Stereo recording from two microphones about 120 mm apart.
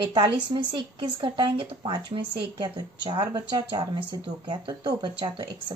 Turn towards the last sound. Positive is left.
turn(degrees=-35)  # may be behind; listen again after turning